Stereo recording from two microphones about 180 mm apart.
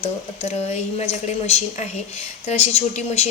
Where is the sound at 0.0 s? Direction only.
35° left (ahead or behind).